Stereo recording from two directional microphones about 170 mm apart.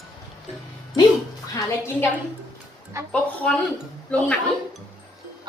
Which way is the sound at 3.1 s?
5° left (ahead or behind).